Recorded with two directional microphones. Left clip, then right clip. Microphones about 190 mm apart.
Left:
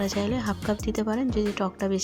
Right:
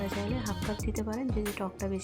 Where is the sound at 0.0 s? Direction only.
30° left (ahead or behind).